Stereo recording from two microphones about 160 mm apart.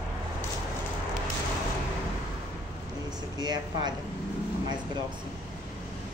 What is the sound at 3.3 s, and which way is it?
Speech, 25° right (ahead or behind).